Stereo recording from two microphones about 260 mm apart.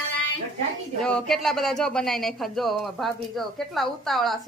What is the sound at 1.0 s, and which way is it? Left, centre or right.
Speech, centre.